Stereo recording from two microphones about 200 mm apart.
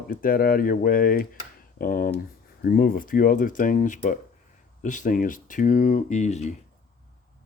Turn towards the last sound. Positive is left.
turn(degrees=35)  # may be behind; listen again after turning